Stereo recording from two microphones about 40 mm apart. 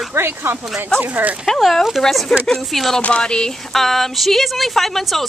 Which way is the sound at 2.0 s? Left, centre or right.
Centre.